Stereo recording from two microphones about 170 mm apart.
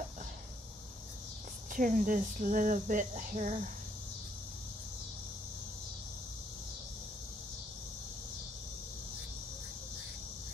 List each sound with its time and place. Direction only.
1.7 s speech: 50° right (ahead or behind)